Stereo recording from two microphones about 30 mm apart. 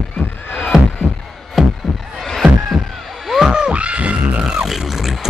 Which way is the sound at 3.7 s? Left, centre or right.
Right.